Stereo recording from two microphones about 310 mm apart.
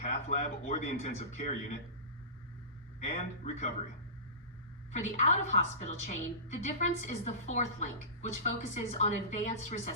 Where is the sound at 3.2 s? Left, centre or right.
Left.